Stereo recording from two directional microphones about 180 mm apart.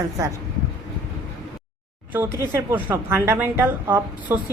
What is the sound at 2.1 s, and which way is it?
A woman's voice, 15° right (ahead or behind).